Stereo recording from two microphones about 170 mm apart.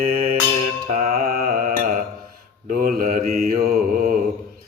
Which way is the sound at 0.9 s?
40° right (ahead or behind).